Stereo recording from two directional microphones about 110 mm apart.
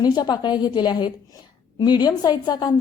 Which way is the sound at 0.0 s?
40° left (ahead or behind).